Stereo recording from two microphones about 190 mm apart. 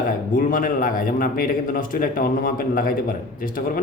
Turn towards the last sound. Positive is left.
turn(degrees=45)  # may be behind; listen again after turning